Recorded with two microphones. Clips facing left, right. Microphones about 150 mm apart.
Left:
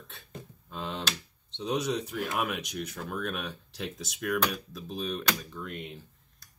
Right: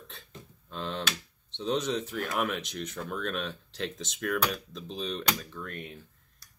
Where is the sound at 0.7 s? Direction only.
10° left (ahead or behind).